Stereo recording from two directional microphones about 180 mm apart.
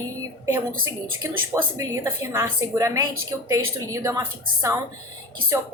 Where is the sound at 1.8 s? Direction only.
15° right (ahead or behind).